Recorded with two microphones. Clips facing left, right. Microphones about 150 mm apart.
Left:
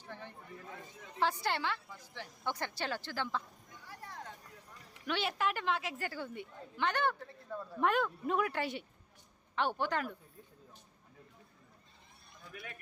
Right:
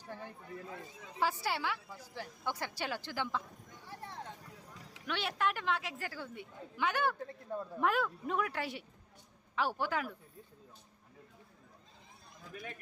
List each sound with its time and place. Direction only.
0.0 s a sound: 10° right (ahead or behind)
1.2 s a woman's voice: 5° right (ahead or behind)
3.8 s a sound: 25° right (ahead or behind)
5.0 s a woman's voice: centre (ahead or behind)
7.5 s speech: 20° right (ahead or behind)
7.8 s a woman's voice: centre (ahead or behind)
12.5 s a man's voice: 35° right (ahead or behind)